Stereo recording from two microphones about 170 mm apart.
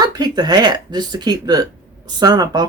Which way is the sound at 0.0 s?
25° right (ahead or behind).